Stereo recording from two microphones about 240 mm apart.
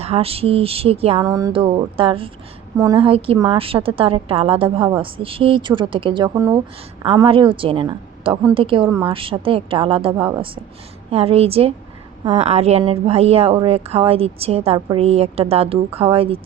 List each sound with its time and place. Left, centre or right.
0.0 s a woman's voice: right